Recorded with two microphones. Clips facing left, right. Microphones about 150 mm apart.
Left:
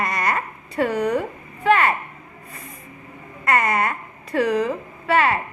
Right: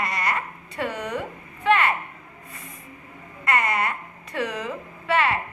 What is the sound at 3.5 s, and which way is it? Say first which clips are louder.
A woman's voice: left 3 dB; 45° left (ahead or behind).